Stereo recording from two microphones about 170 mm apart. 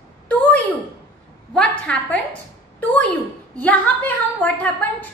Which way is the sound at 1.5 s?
5° left (ahead or behind).